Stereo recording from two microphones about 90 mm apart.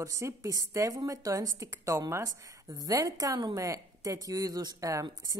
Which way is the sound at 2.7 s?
45° right (ahead or behind).